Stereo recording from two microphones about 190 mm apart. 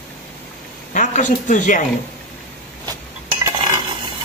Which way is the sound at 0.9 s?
40° left (ahead or behind).